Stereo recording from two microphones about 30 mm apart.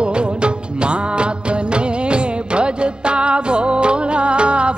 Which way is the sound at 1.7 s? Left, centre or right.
Right.